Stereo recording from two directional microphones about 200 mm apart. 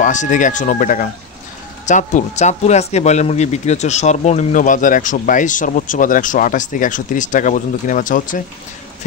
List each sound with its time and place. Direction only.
0.0 s speech: 40° left (ahead or behind)